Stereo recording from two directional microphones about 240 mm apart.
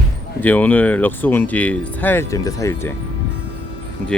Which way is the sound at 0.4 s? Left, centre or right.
Centre.